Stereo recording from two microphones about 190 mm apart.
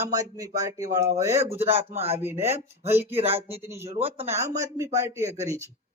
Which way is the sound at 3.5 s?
15° right (ahead or behind).